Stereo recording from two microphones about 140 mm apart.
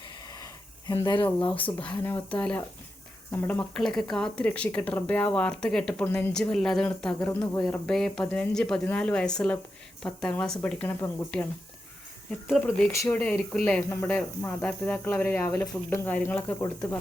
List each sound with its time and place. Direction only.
0.3 s a sound: 25° left (ahead or behind)
1.0 s speech: 35° left (ahead or behind)
1.5 s speech: 10° left (ahead or behind)
7.6 s speech: 5° left (ahead or behind)
12.9 s speech: 20° left (ahead or behind)
13.1 s speech: 10° left (ahead or behind)